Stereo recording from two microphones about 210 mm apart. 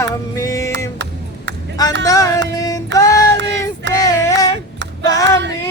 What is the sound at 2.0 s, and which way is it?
Music, 15° left (ahead or behind).